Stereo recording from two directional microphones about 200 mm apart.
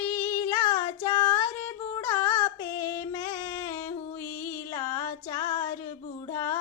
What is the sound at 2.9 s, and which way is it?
Music, 15° left (ahead or behind).